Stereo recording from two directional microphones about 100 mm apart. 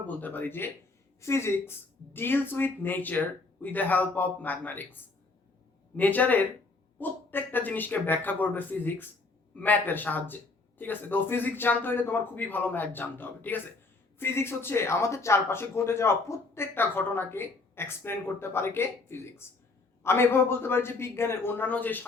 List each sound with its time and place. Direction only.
0.1 s speech: 20° left (ahead or behind)
6.0 s speech: 15° left (ahead or behind)